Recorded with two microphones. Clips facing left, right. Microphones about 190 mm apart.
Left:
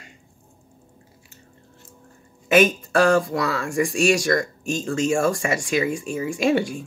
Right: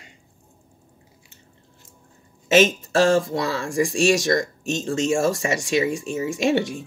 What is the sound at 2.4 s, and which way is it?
Speech, 25° right (ahead or behind).